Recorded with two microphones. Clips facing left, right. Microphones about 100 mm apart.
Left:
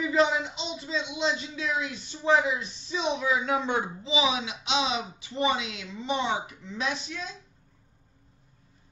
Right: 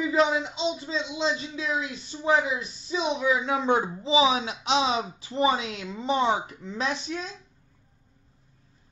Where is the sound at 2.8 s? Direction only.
10° right (ahead or behind).